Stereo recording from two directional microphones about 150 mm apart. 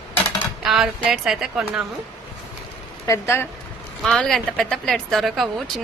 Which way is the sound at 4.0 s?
5° left (ahead or behind).